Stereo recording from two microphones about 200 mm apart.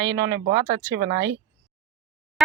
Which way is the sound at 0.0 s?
15° right (ahead or behind).